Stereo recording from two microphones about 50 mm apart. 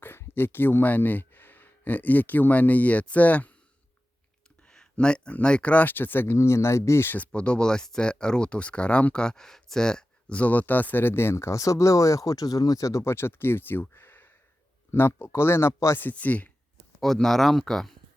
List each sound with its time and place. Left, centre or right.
0.3 s speech: left
4.7 s speech: centre
5.8 s speech: left
6.3 s speech: left
7.2 s speech: left
10.3 s speech: left
16.1 s speech: left
17.2 s speech: centre